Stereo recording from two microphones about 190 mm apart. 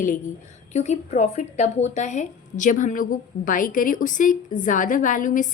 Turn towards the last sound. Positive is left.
turn(degrees=45)  # may be behind; listen again after turning